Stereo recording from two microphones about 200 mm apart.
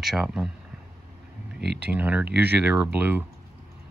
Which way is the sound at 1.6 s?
55° right (ahead or behind).